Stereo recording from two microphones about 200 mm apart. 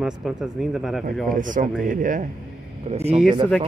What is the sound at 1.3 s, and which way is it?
Speech, 40° right (ahead or behind).